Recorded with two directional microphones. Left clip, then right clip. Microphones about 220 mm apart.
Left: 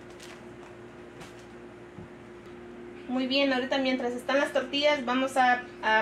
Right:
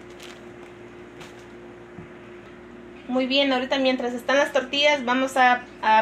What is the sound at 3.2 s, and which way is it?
A woman's voice, 35° right (ahead or behind).